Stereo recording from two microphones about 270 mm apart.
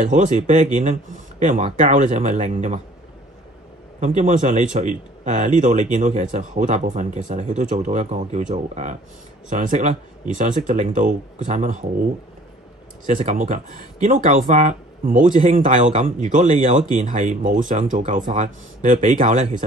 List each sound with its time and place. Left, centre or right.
0.0 s speech: right
4.0 s speech: right
13.0 s speech: right